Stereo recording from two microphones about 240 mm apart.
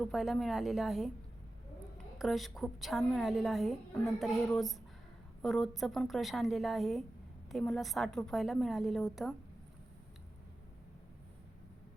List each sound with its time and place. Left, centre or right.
0.0 s a woman's voice: centre
2.1 s a woman's voice: centre